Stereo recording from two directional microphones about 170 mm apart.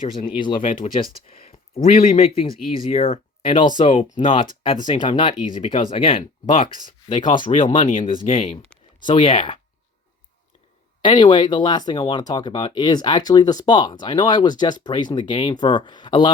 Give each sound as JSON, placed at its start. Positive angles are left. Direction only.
{"t": 0.2, "sound": "speech", "side_deg": 30}
{"t": 0.6, "sound": "speech", "side_deg": 50}
{"t": 1.9, "sound": "speech", "side_deg": 35}
{"t": 11.0, "sound": "speech", "side_deg": 25}